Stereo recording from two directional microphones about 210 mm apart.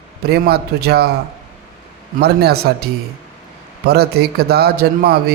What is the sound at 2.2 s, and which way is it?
Speech, 50° right (ahead or behind).